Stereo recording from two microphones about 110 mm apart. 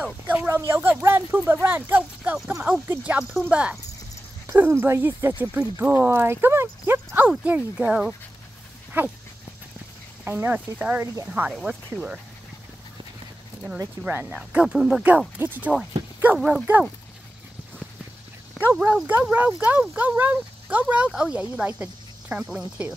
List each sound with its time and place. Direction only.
0.0 s speech: 15° right (ahead or behind)
4.5 s speech: 20° right (ahead or behind)
10.2 s speech: 20° right (ahead or behind)
14.0 s speech: 15° right (ahead or behind)
16.3 s speech: centre (ahead or behind)
18.6 s speech: 15° right (ahead or behind)